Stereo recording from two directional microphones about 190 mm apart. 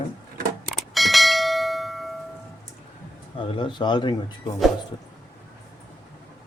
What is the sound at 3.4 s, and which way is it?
Speech, 25° left (ahead or behind).